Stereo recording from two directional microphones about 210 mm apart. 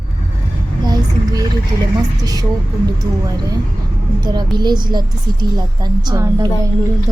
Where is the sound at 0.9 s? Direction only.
15° right (ahead or behind).